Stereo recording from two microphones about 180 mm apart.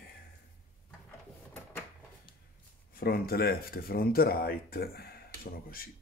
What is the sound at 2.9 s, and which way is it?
Speech, 55° left (ahead or behind).